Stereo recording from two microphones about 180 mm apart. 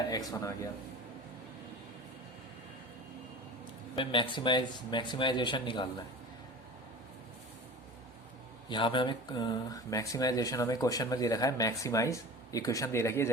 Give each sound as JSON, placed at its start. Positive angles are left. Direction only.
{"t": 0.1, "sound": "speech", "side_deg": 20}
{"t": 3.9, "sound": "speech", "side_deg": 30}
{"t": 8.7, "sound": "speech", "side_deg": 25}